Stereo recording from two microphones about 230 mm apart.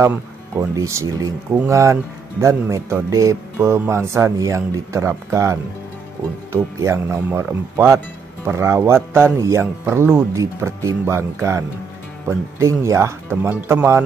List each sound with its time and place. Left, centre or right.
0.6 s speech: centre